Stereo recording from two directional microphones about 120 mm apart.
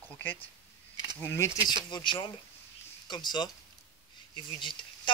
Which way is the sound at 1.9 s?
40° left (ahead or behind).